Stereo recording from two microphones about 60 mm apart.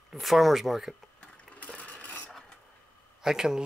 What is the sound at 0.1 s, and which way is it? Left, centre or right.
Speech, centre.